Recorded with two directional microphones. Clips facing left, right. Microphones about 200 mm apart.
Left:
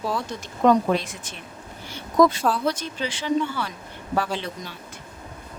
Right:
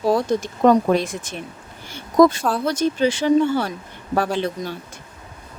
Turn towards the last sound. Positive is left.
turn(degrees=-50)  # may be behind; listen again after turning